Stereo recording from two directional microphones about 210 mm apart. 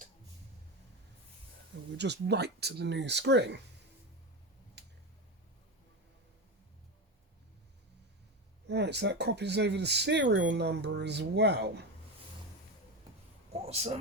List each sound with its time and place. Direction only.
2.0 s speech: 55° right (ahead or behind)
4.8 s finger snapping: 55° right (ahead or behind)
8.6 s speech: 55° right (ahead or behind)
13.5 s speech: 30° right (ahead or behind)